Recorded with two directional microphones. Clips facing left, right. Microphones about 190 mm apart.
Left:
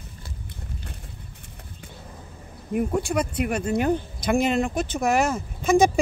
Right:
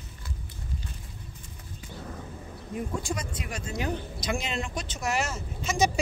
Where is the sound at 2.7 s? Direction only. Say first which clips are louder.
Left 9 dB; 65° left (ahead or behind).